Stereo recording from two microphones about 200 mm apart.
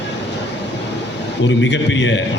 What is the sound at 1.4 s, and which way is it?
Speech, 65° left (ahead or behind).